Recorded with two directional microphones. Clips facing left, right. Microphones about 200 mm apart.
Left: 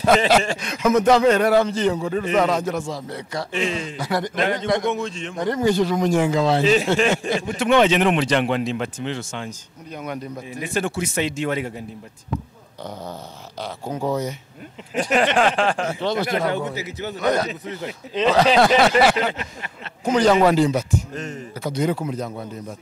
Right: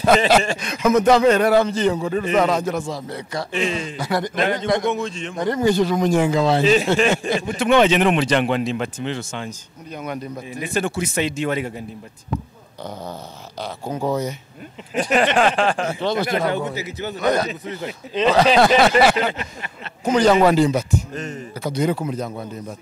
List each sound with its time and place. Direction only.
0.0 s speech: 10° right (ahead or behind)
10.6 s speech: 10° right (ahead or behind)
13.6 s speech: 25° right (ahead or behind)
15.0 s speech: 10° right (ahead or behind)
21.9 s speech: 25° right (ahead or behind)